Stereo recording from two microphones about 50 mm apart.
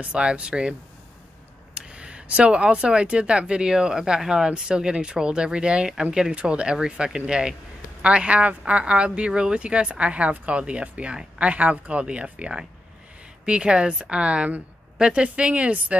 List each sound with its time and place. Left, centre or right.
0.0 s speech: right
1.8 s speech: right